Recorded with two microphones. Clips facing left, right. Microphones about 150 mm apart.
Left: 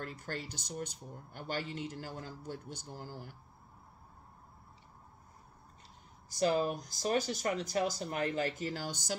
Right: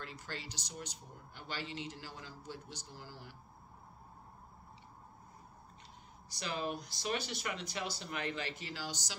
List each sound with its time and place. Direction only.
0.0 s speech: 50° left (ahead or behind)
6.3 s speech: 40° left (ahead or behind)